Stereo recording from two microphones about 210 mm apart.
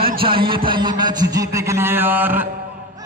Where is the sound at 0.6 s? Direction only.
20° right (ahead or behind).